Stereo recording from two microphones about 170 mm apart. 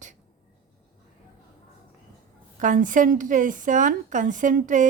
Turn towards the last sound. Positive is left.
turn(degrees=-50)  # may be behind; listen again after turning